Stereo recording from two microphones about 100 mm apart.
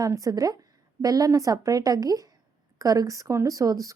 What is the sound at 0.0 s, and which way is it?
A woman's voice, 35° right (ahead or behind).